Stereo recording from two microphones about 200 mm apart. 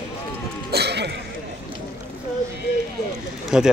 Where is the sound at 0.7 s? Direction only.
55° right (ahead or behind).